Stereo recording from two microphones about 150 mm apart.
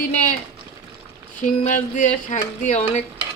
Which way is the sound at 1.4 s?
55° left (ahead or behind).